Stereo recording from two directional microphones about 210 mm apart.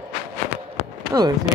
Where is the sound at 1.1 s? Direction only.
15° right (ahead or behind).